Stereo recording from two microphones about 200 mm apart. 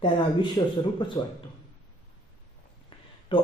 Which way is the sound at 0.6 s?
20° left (ahead or behind).